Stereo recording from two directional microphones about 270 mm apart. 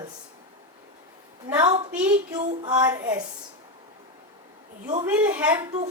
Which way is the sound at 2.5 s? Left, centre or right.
Right.